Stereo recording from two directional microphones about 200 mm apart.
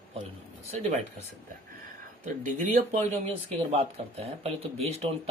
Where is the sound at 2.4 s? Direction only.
35° right (ahead or behind).